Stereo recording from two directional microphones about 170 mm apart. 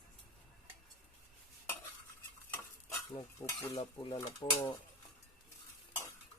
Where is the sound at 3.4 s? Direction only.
10° left (ahead or behind).